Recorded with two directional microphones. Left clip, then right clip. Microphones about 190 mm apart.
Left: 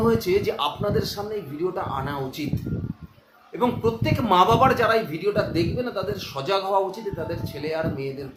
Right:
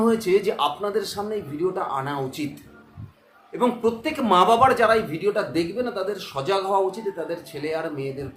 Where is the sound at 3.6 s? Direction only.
15° right (ahead or behind).